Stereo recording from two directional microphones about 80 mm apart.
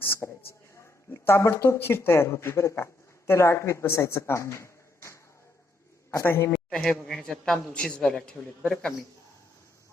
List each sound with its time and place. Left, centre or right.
0.0 s a sound: left
1.1 s a man's voice: left
6.5 s a man's voice: centre